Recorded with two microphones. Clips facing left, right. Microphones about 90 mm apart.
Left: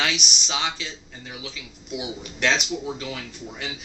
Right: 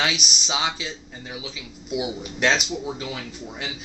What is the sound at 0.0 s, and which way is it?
A man's voice, 10° right (ahead or behind).